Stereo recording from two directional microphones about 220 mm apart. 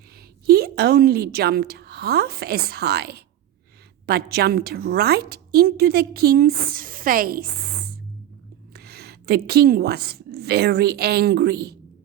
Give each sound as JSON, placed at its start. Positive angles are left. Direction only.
{"t": 0.4, "sound": "a woman's voice", "side_deg": -45}